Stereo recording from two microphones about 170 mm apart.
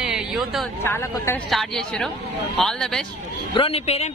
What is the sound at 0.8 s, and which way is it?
Speech, 15° left (ahead or behind).